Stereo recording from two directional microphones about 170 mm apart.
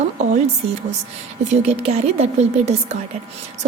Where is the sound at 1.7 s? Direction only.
40° right (ahead or behind).